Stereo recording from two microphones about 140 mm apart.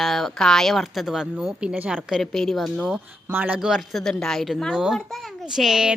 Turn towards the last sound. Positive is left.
turn(degrees=-5)  # may be behind; listen again after turning